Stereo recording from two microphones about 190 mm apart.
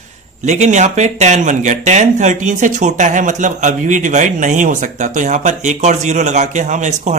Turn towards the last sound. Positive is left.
turn(degrees=-40)  # may be behind; listen again after turning